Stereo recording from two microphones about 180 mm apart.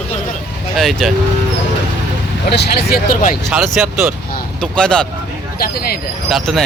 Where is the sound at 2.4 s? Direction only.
65° left (ahead or behind).